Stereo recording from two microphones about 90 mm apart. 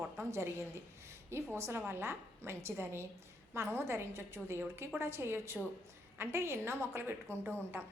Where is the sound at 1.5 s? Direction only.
30° right (ahead or behind).